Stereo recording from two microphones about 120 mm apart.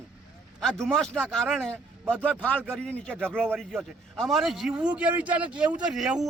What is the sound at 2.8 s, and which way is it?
A man's voice, 10° left (ahead or behind).